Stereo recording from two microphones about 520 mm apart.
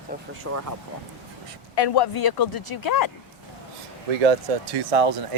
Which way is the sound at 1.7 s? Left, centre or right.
Left.